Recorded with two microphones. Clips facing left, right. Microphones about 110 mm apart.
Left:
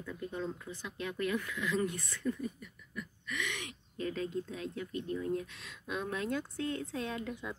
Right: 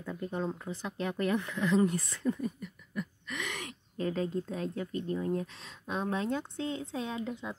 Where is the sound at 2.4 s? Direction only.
45° right (ahead or behind).